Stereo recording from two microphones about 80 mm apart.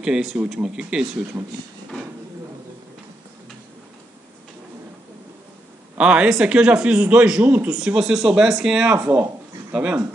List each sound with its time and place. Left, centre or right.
0.0 s a man's voice: centre
5.9 s a man's voice: centre
8.9 s speech: right
9.7 s speech: centre